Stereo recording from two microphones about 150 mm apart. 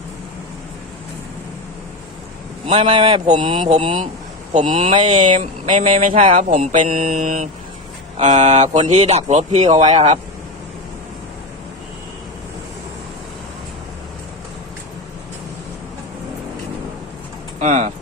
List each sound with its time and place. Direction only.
2.6 s a man's voice: 40° right (ahead or behind)
17.6 s speech: 50° right (ahead or behind)